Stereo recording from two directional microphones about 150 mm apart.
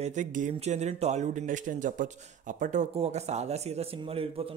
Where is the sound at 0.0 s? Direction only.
55° right (ahead or behind).